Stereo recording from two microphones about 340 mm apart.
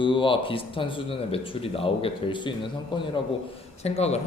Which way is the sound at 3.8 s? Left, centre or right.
Centre.